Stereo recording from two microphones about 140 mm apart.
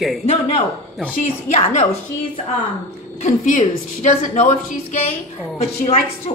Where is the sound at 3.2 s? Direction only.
65° left (ahead or behind).